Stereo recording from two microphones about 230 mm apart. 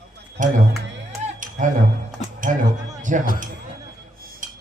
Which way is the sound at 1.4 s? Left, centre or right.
Right.